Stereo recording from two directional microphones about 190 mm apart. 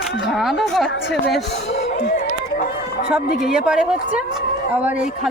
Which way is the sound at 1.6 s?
60° left (ahead or behind).